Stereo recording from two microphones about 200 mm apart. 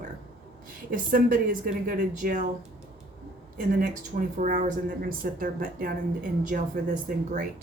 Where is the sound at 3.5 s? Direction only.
40° right (ahead or behind).